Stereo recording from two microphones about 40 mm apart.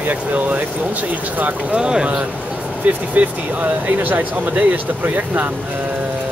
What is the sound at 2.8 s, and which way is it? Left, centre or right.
Speech, right.